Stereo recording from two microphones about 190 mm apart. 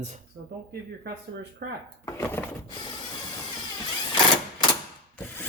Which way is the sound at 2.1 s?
10° left (ahead or behind).